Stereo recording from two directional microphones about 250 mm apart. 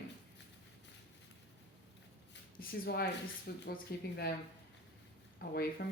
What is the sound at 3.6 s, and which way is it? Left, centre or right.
Speech, left.